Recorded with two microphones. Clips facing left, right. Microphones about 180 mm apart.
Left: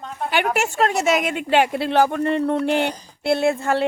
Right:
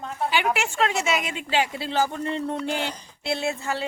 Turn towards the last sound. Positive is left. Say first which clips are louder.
# left 8 dB
turn(degrees=55)  # may be behind; listen again after turning